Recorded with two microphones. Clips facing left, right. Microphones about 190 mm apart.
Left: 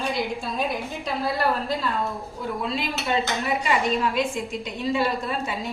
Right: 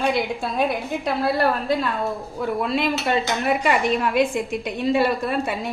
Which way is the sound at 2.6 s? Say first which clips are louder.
Right 6 dB; 60° right (ahead or behind).